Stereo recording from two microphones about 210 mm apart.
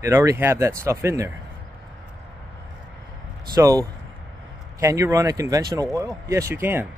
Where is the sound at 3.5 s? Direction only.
15° right (ahead or behind).